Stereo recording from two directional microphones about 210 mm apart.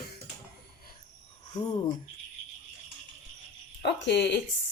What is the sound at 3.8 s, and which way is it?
Speech, 55° left (ahead or behind).